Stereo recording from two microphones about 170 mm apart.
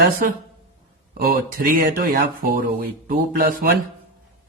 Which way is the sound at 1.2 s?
60° right (ahead or behind).